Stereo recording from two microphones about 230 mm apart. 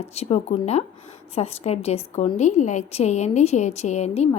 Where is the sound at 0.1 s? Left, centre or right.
Left.